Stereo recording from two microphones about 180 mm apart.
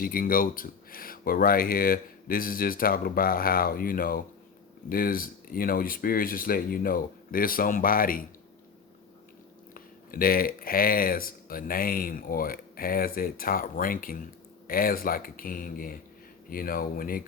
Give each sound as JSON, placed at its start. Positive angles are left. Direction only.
{"t": 0.0, "sound": "speech", "side_deg": 50}
{"t": 9.7, "sound": "speech", "side_deg": 55}